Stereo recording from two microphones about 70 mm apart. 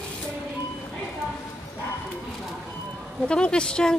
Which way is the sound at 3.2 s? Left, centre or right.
Centre.